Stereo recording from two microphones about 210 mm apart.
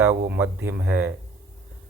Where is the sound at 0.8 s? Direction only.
50° right (ahead or behind).